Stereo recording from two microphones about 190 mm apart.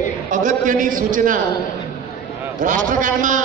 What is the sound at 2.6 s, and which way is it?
Speech, 45° right (ahead or behind).